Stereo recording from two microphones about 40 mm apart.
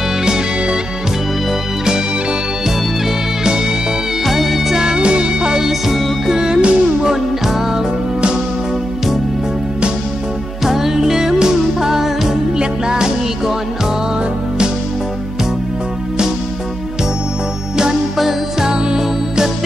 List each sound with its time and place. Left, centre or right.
0.2 s music: centre
4.3 s music: centre
4.8 s music: right
5.7 s music: centre
6.3 s music: centre
7.0 s music: centre
10.6 s music: centre
18.1 s music: centre
18.7 s music: centre